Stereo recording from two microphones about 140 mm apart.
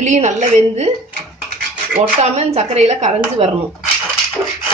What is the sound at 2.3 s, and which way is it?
A woman's voice, 50° right (ahead or behind).